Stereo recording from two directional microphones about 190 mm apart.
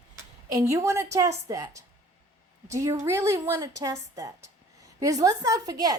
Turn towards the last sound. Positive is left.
turn(degrees=-20)  # may be behind; listen again after turning